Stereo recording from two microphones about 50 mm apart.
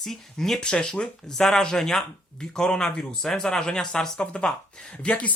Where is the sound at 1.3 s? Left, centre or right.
Centre.